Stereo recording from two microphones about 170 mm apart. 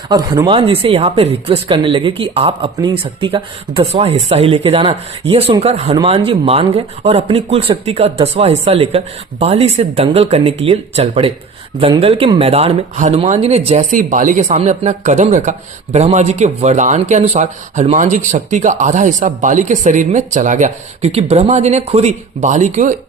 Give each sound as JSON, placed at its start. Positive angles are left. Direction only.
{"t": 0.1, "sound": "speech", "side_deg": -25}
{"t": 13.9, "sound": "speech", "side_deg": -50}